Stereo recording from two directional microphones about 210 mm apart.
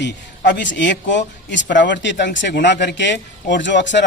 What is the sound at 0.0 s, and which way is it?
A man's voice, 55° left (ahead or behind).